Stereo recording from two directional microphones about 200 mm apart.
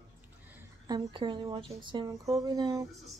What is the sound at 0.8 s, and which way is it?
Speech, 20° right (ahead or behind).